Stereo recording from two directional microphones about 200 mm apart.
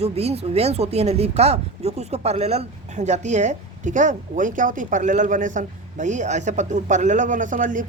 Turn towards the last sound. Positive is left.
turn(degrees=-40)  # may be behind; listen again after turning